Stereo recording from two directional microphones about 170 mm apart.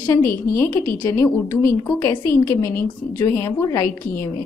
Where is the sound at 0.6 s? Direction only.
15° left (ahead or behind).